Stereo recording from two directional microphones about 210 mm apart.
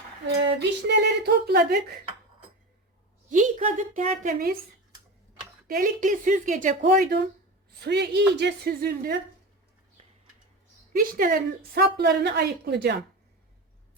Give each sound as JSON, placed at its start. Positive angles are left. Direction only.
{"t": 0.3, "sound": "speech", "side_deg": -50}
{"t": 3.2, "sound": "speech", "side_deg": -35}
{"t": 5.6, "sound": "speech", "side_deg": -40}
{"t": 11.1, "sound": "speech", "side_deg": -45}